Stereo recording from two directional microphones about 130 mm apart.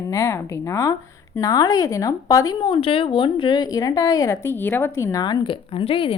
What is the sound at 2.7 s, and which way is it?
A woman's voice, 45° left (ahead or behind).